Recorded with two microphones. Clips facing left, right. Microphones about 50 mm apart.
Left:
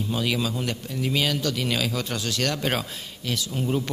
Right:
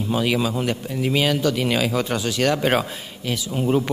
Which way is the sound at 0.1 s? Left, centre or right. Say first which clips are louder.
Right 6 dB; centre.